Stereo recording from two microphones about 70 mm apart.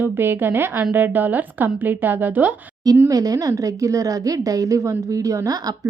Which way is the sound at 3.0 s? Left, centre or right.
Right.